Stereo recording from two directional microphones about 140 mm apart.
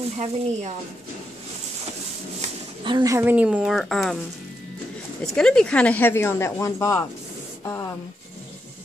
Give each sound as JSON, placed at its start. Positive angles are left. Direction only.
{"t": 0.2, "sound": "speech", "side_deg": -50}
{"t": 2.8, "sound": "a woman's voice", "side_deg": -30}
{"t": 5.2, "sound": "speech", "side_deg": 5}